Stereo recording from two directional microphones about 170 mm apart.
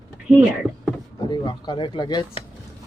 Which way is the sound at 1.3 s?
25° left (ahead or behind).